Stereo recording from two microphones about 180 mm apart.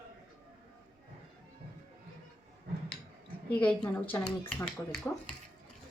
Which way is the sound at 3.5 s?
5° left (ahead or behind).